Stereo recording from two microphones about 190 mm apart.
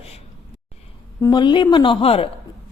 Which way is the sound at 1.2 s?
25° left (ahead or behind).